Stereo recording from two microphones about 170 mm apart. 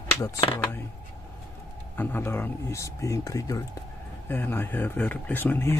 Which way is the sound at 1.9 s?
10° left (ahead or behind).